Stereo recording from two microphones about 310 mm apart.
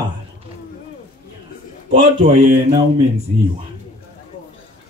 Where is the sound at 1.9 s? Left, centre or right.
Centre.